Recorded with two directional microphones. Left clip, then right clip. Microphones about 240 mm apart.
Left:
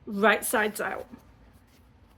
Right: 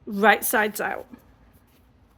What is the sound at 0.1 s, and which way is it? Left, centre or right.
Speech, right.